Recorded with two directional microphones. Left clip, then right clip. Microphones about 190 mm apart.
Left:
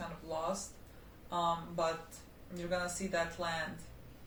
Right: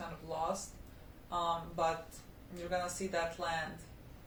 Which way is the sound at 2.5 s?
15° left (ahead or behind).